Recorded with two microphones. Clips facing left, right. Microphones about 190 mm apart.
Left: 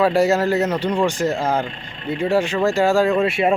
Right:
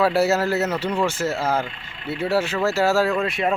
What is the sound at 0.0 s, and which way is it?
Speech, 5° right (ahead or behind).